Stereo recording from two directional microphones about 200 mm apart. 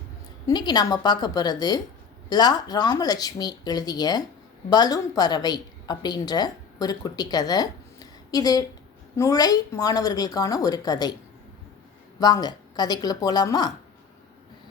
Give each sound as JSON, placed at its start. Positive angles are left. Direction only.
{"t": 0.4, "sound": "a woman's voice", "side_deg": 20}
{"t": 12.2, "sound": "a woman's voice", "side_deg": 20}